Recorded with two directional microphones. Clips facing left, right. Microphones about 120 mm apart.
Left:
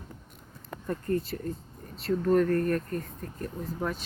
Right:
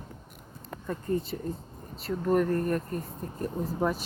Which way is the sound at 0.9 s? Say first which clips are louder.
Left 1 dB; 5° right (ahead or behind).